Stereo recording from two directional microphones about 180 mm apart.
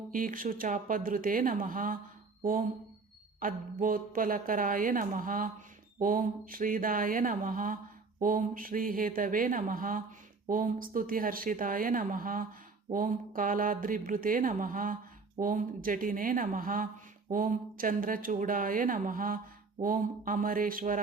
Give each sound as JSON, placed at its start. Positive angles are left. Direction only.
{"t": 0.1, "sound": "a woman's voice", "side_deg": -50}